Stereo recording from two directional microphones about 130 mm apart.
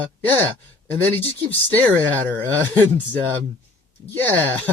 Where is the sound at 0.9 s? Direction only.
15° left (ahead or behind).